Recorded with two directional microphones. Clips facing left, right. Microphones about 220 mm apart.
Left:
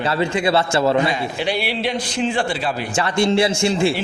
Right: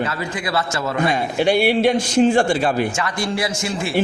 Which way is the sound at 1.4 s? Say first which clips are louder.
Right 8 dB; 50° right (ahead or behind).